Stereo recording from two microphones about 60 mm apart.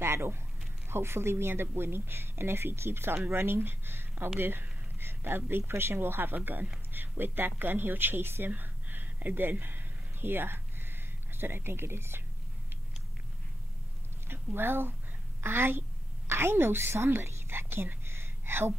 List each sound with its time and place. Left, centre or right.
0.0 s speech: right
14.2 s a woman's voice: right